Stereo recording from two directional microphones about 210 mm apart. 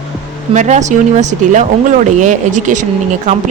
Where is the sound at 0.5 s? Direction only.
35° right (ahead or behind).